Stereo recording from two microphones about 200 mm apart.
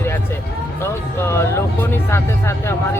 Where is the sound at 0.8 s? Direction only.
10° left (ahead or behind).